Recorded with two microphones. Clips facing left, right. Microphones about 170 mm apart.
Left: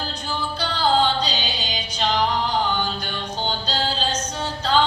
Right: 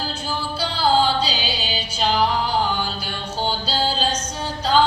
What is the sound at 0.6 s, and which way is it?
Music, 10° right (ahead or behind).